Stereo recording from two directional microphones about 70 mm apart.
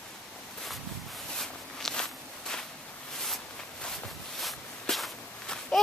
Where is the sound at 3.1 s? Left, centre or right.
Centre.